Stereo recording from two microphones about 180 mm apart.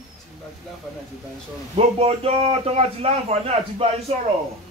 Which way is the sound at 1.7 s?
35° right (ahead or behind).